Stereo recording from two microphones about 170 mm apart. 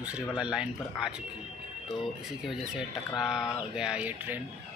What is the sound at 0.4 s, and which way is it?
Speech, 5° right (ahead or behind).